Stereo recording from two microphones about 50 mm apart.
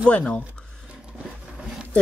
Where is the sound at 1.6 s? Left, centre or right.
Centre.